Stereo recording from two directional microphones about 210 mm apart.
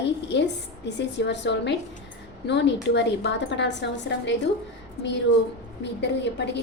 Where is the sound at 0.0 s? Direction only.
55° left (ahead or behind).